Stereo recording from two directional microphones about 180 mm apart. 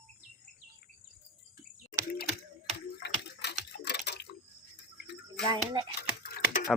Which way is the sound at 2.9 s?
65° left (ahead or behind).